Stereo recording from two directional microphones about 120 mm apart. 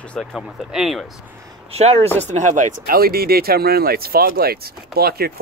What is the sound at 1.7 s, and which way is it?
Speech, 60° right (ahead or behind).